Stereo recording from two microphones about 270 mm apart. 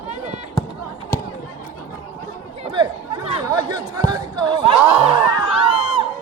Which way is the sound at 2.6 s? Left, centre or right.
Centre.